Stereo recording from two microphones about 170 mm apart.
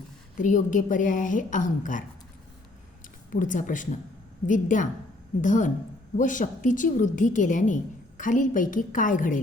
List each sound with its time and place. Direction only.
0.3 s a woman's voice: 50° left (ahead or behind)
3.3 s a woman's voice: 50° left (ahead or behind)